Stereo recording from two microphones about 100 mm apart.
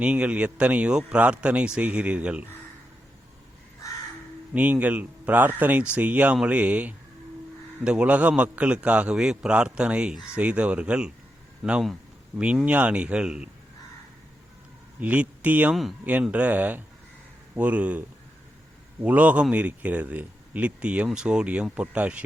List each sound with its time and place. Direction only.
0.0 s speech: 15° right (ahead or behind)
4.5 s speech: 15° right (ahead or behind)
15.0 s speech: 15° right (ahead or behind)
15.7 s speech: centre (ahead or behind)
16.0 s speech: 15° right (ahead or behind)
19.0 s speech: 15° right (ahead or behind)